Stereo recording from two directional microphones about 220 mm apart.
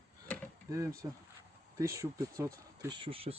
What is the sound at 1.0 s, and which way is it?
Speech, 20° right (ahead or behind).